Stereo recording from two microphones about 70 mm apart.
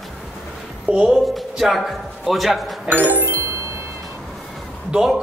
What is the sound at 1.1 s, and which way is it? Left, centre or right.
A man's voice, centre.